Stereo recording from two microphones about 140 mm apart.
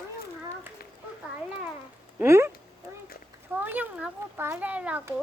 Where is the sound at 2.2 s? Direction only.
20° right (ahead or behind).